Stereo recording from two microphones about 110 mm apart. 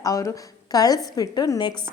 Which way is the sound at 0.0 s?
30° left (ahead or behind).